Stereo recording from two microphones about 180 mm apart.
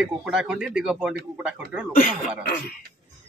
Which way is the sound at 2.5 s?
55° left (ahead or behind).